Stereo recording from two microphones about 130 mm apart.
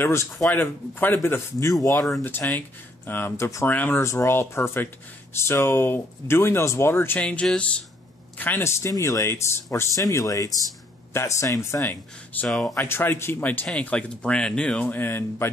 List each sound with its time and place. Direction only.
0.0 s speech: 20° left (ahead or behind)
3.1 s speech: 15° left (ahead or behind)
12.4 s speech: centre (ahead or behind)
12.7 s speech: 20° left (ahead or behind)